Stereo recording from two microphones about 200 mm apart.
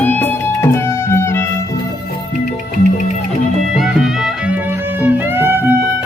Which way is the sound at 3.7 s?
Centre (ahead or behind).